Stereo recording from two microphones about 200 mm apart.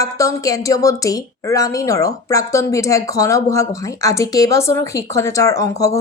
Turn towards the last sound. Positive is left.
turn(degrees=15)  # may be behind; listen again after turning